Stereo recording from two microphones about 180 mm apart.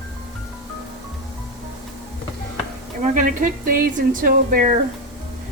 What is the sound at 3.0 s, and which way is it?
Speech, 45° right (ahead or behind).